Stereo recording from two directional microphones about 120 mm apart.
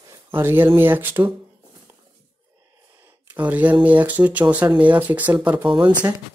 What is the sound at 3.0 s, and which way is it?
Speech, 15° right (ahead or behind).